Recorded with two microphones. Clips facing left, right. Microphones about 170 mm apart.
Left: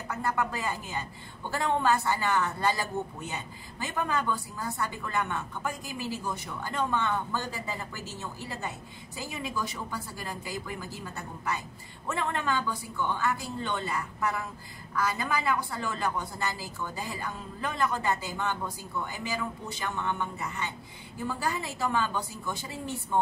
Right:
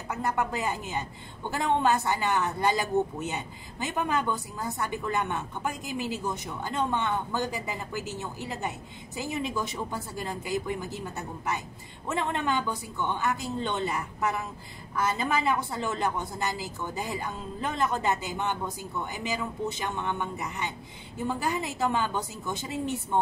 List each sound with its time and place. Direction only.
0.1 s speech: 20° right (ahead or behind)